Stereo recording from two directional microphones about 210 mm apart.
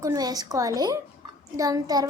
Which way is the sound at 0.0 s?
15° right (ahead or behind).